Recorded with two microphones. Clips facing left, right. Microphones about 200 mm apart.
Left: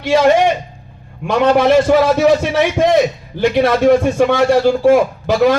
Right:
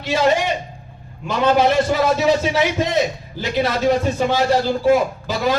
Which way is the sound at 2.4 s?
55° left (ahead or behind).